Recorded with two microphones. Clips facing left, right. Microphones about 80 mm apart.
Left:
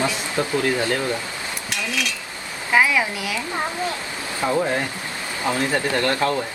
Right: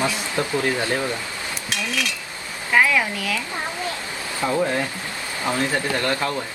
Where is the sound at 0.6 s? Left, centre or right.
Right.